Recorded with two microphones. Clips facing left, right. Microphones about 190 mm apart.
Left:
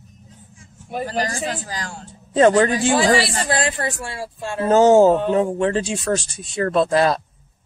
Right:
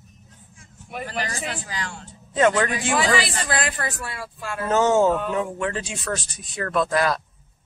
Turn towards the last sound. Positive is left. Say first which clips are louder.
# left 5 dB
turn(degrees=30)  # may be behind; listen again after turning